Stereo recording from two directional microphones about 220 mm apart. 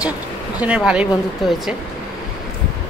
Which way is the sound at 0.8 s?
Centre (ahead or behind).